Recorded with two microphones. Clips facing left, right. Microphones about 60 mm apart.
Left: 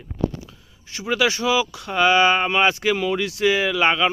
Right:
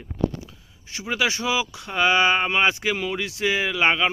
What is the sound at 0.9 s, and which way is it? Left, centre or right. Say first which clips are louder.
Speech: left 3 dB; centre.